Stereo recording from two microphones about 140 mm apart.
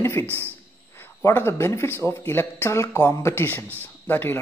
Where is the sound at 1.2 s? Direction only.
20° left (ahead or behind).